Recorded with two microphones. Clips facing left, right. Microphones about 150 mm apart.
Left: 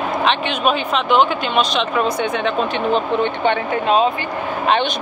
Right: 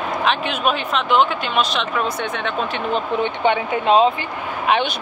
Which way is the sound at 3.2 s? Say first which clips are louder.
Left 1 dB; 15° right (ahead or behind).